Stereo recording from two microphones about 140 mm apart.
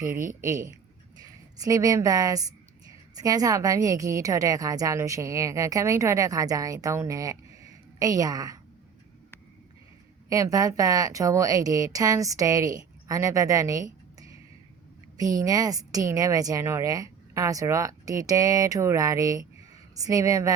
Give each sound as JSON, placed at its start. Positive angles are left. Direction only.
{"t": 0.1, "sound": "a woman's voice", "side_deg": -75}
{"t": 0.4, "sound": "a woman's voice", "side_deg": -20}
{"t": 10.2, "sound": "a woman's voice", "side_deg": -25}
{"t": 15.4, "sound": "a woman's voice", "side_deg": -25}